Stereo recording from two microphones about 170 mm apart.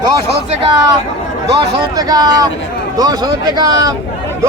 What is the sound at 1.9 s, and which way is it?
Speech, 20° right (ahead or behind).